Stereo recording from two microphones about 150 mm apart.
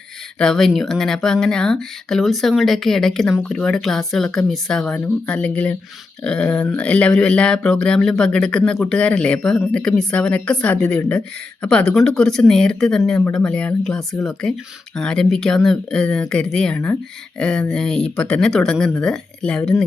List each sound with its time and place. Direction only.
0.3 s speech: 5° left (ahead or behind)